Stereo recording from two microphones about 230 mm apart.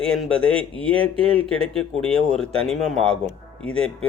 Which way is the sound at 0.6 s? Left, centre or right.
Right.